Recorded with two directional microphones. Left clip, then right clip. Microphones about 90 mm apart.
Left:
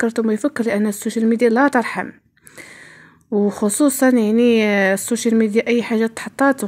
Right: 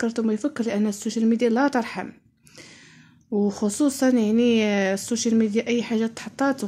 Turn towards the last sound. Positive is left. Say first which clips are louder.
# left 7 dB
turn(degrees=45)  # may be behind; listen again after turning